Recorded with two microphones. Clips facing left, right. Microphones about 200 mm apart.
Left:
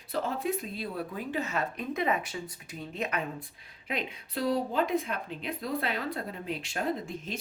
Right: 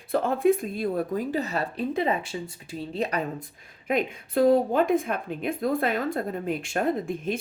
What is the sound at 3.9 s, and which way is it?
A woman's voice, 50° right (ahead or behind).